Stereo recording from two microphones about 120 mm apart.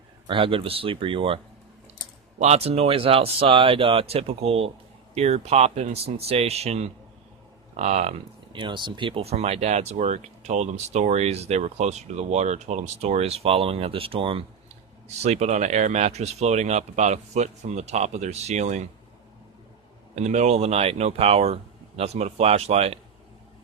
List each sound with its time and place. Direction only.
0.3 s speech: 45° right (ahead or behind)
2.4 s speech: 60° right (ahead or behind)
8.5 s speech: 40° right (ahead or behind)
15.2 s speech: 65° right (ahead or behind)
20.1 s speech: 75° right (ahead or behind)